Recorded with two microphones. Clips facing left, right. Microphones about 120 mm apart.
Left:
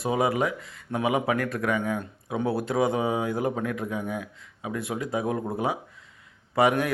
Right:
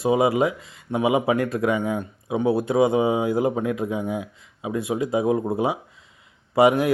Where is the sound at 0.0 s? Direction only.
20° right (ahead or behind).